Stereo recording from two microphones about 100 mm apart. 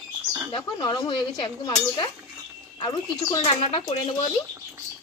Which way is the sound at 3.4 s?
75° left (ahead or behind).